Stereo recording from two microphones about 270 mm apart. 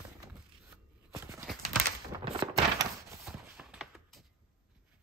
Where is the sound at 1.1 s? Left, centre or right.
Centre.